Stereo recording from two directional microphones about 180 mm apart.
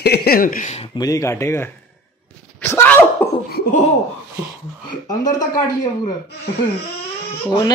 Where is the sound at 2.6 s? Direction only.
15° left (ahead or behind).